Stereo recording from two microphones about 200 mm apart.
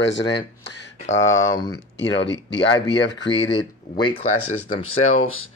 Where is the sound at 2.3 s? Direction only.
65° left (ahead or behind).